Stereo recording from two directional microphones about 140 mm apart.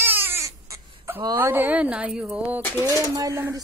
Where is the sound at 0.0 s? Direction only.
15° right (ahead or behind).